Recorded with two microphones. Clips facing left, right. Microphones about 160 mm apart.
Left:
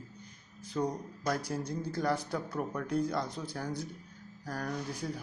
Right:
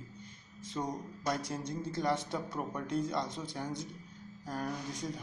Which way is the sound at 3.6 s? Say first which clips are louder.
Left 2 dB; 20° right (ahead or behind).